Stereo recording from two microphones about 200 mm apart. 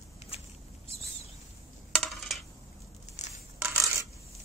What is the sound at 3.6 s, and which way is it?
Coin, 10° right (ahead or behind).